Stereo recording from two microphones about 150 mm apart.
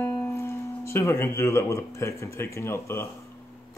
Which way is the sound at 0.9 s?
15° left (ahead or behind).